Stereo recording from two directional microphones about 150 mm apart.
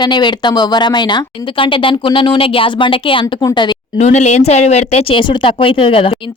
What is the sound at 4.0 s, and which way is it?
A woman's voice, 50° left (ahead or behind).